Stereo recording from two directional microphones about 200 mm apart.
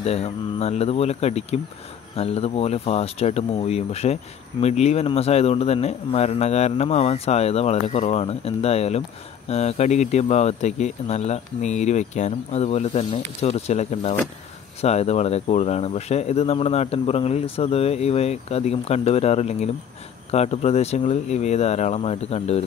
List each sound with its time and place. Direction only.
0.0 s speech: 30° left (ahead or behind)